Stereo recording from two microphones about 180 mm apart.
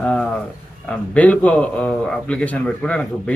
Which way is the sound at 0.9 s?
5° left (ahead or behind).